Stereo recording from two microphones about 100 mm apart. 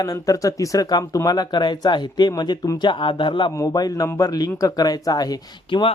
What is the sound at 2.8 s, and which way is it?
Speech, 55° left (ahead or behind).